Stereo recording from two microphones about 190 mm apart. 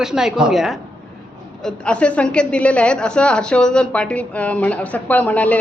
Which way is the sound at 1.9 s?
5° left (ahead or behind).